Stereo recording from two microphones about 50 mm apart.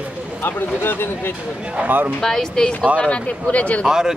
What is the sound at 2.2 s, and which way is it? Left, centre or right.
Speech, centre.